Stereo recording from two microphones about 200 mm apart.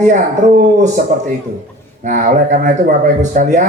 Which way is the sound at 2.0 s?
40° right (ahead or behind).